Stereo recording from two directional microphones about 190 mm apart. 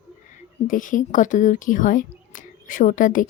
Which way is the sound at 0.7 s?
45° left (ahead or behind).